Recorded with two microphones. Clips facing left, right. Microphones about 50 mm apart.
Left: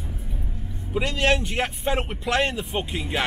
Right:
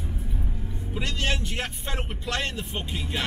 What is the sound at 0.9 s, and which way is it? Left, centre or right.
Speech, centre.